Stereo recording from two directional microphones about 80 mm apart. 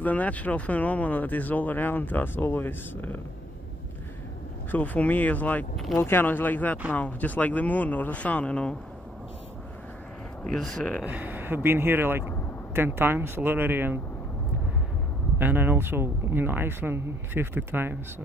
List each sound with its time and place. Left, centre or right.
0.0 s speech: centre
4.6 s speech: left
10.4 s speech: centre
11.1 s a man's voice: right
15.3 s a man's voice: right